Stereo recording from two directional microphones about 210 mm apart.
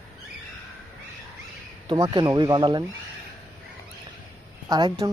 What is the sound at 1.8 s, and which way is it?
Speech, 20° right (ahead or behind).